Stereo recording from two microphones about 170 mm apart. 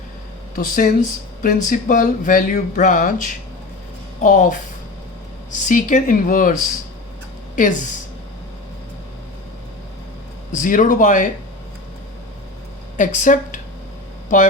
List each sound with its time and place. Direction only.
0.5 s speech: 50° left (ahead or behind)
5.6 s speech: 50° left (ahead or behind)
7.5 s speech: 50° left (ahead or behind)
10.5 s speech: 50° left (ahead or behind)
13.0 s speech: 50° left (ahead or behind)